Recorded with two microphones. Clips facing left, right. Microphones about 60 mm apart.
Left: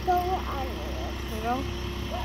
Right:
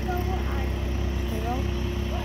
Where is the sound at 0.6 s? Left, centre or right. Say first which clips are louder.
Right 1 dB; centre.